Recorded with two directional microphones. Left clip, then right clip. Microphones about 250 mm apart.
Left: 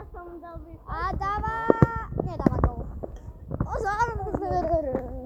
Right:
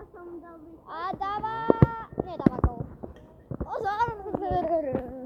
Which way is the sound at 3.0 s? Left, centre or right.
Left.